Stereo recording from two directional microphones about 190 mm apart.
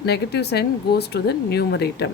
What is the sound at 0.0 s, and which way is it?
A woman's voice, 60° left (ahead or behind).